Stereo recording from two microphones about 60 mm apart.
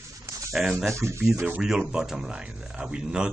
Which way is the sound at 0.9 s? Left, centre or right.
Right.